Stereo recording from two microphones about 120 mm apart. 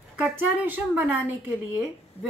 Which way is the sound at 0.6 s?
15° right (ahead or behind).